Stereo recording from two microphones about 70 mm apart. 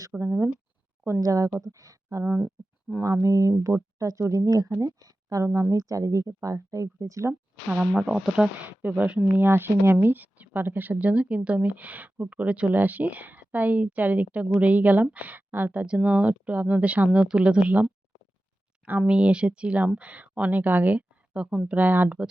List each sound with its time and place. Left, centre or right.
0.2 s speech: right
7.7 s speech: centre
8.8 s speech: right
18.9 s speech: centre